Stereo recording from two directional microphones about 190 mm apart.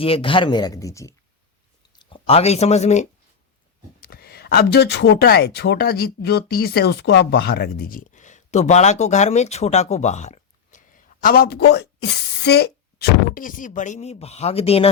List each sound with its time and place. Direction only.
0.0 s speech: 30° left (ahead or behind)
4.0 s speech: 55° left (ahead or behind); by 14.8 s 30° left (ahead or behind)